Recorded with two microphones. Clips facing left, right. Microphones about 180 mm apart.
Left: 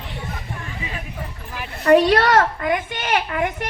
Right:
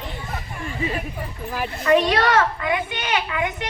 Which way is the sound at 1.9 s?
50° left (ahead or behind).